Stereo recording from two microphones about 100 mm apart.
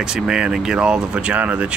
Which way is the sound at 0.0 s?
5° right (ahead or behind).